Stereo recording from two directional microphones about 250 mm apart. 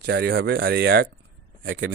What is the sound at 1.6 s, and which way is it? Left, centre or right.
Speech, right.